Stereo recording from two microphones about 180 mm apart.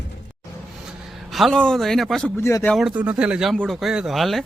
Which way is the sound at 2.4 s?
15° left (ahead or behind).